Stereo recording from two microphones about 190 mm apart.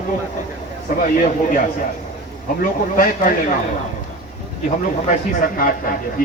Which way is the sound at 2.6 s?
45° left (ahead or behind).